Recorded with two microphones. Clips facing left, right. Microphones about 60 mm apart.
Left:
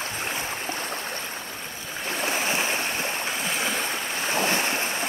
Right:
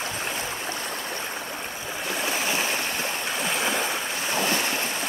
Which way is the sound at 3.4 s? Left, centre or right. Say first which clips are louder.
Right 4 dB; centre.